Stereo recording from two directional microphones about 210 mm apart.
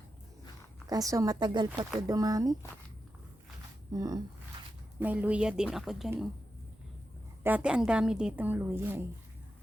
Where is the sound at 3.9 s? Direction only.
20° right (ahead or behind).